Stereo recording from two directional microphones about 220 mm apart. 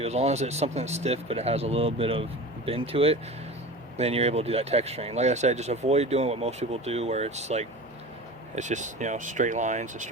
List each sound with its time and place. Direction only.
0.0 s speech: 30° right (ahead or behind)